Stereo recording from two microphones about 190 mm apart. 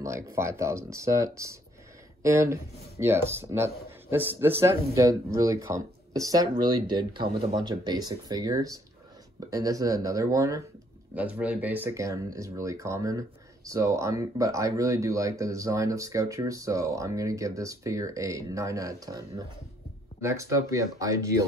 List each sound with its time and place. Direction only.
0.0 s speech: 15° right (ahead or behind)